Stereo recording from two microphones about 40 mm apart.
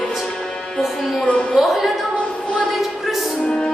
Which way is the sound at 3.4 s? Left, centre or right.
Centre.